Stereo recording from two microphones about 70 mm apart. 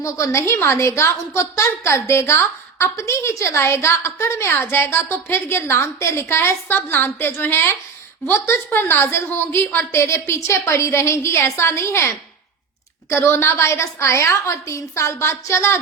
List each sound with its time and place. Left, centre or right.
0.0 s a woman's voice: left